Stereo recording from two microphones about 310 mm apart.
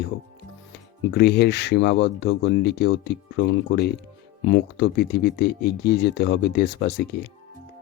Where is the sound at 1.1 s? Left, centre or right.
Left.